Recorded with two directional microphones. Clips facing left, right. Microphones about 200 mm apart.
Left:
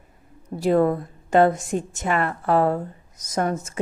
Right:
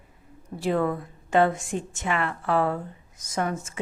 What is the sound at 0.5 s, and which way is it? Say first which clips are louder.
A woman's voice: left 6 dB; 40° left (ahead or behind).